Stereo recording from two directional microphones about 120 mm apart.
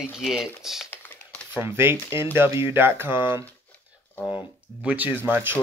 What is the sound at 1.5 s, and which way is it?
Speech, 20° right (ahead or behind).